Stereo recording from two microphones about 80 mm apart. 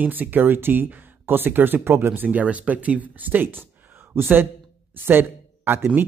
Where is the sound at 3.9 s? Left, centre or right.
Right.